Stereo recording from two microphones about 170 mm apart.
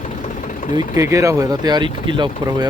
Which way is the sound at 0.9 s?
15° right (ahead or behind).